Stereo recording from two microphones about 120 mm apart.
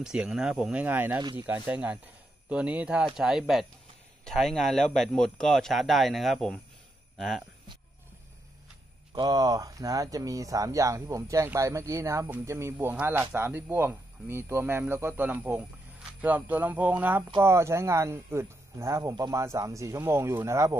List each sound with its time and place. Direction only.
0.0 s a man's voice: 5° right (ahead or behind)
9.1 s speech: 35° right (ahead or behind)